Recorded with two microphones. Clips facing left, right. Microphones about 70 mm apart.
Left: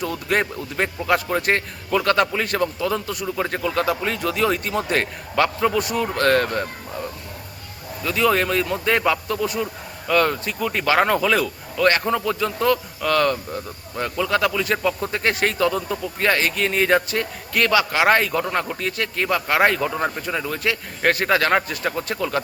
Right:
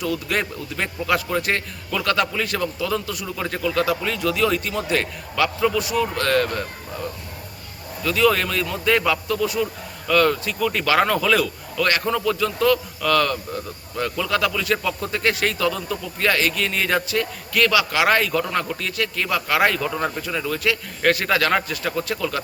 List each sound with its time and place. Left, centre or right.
0.0 s speech: left
8.1 s speech: left
14.6 s speech: left